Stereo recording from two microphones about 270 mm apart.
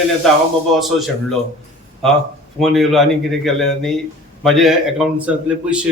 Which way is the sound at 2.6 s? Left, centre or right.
Centre.